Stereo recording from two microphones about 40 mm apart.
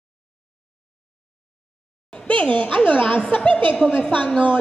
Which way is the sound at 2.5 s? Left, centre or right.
Left.